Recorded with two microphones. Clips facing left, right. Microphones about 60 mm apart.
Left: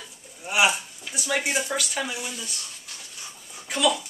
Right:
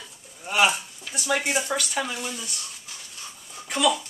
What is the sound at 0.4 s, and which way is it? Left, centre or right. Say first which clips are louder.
A child's voice: even; centre.